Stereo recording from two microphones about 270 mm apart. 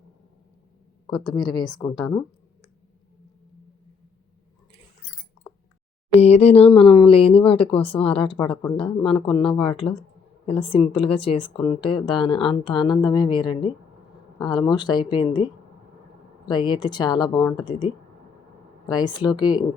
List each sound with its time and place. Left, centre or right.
1.4 s speech: centre
2.0 s speech: centre
6.1 s speech: left
16.5 s speech: centre